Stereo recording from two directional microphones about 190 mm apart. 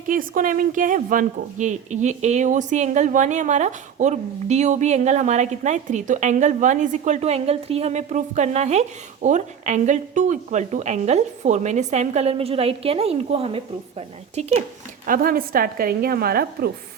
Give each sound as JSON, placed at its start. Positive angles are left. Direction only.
{"t": 0.1, "sound": "speech", "side_deg": -45}
{"t": 15.0, "sound": "a woman's voice", "side_deg": -45}